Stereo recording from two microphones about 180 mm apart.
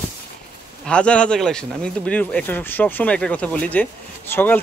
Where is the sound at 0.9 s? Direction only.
5° left (ahead or behind).